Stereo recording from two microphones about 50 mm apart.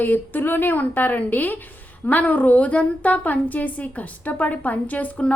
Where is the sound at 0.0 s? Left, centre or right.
Left.